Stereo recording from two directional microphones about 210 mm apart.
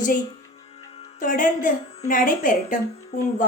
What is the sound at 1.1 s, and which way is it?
A woman's voice, 40° left (ahead or behind).